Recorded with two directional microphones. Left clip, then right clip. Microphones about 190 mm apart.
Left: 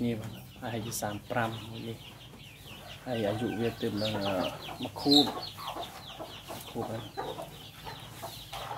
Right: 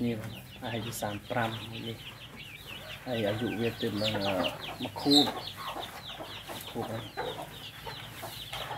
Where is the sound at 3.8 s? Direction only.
5° left (ahead or behind).